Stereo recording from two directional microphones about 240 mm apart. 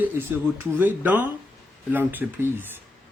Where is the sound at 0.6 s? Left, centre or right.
Centre.